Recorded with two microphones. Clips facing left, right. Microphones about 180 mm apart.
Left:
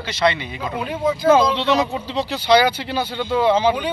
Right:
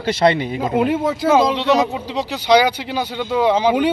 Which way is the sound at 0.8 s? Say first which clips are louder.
Right 4 dB; 90° right.